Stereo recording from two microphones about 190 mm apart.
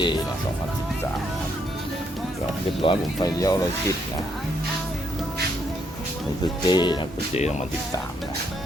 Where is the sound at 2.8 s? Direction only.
25° left (ahead or behind).